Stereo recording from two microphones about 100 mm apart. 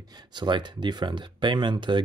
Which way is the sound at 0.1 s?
50° right (ahead or behind).